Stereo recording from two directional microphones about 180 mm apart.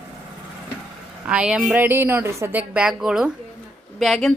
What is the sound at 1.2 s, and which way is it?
A woman's voice, 5° right (ahead or behind).